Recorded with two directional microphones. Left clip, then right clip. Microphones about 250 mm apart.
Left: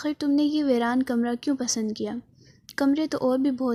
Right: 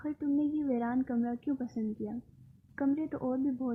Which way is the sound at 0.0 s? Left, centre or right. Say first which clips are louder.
Left 8 dB; left.